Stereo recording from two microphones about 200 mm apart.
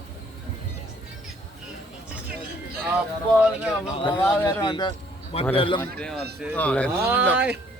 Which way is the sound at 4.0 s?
25° left (ahead or behind).